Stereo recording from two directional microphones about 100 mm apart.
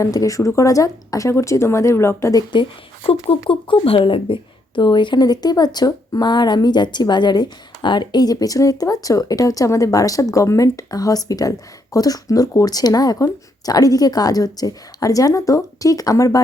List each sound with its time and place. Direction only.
0.0 s speech: 35° left (ahead or behind)
2.5 s speech: 55° left (ahead or behind)
4.8 s speech: 50° left (ahead or behind)